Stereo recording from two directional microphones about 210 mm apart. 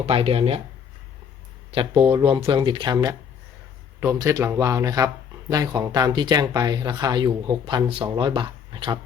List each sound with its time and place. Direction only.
0.0 s speech: 25° right (ahead or behind)
1.7 s speech: 25° right (ahead or behind)